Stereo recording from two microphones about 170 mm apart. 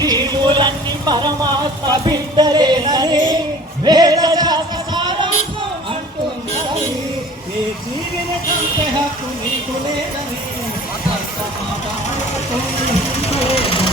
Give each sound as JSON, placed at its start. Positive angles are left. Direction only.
{"t": 0.0, "sound": "music", "side_deg": -25}
{"t": 1.9, "sound": "singing", "side_deg": -25}
{"t": 3.8, "sound": "a sound", "side_deg": -25}
{"t": 13.2, "sound": "vehicle", "side_deg": 35}